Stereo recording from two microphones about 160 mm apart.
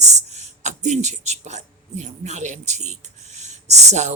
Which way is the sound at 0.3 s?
45° right (ahead or behind).